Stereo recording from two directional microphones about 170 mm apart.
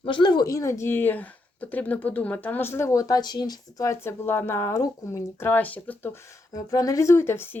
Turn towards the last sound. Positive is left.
turn(degrees=15)  # may be behind; listen again after turning